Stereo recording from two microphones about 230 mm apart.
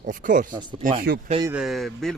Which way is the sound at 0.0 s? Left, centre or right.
Right.